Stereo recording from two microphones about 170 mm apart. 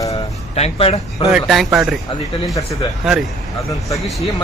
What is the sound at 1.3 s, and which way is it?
Speech, centre (ahead or behind).